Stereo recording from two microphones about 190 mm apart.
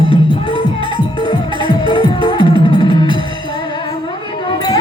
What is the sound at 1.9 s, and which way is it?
Music, 25° left (ahead or behind).